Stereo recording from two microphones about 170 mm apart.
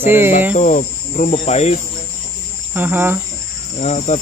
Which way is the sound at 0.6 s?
55° left (ahead or behind).